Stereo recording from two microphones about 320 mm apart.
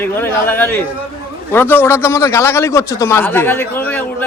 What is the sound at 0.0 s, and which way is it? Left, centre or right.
A man's voice, centre.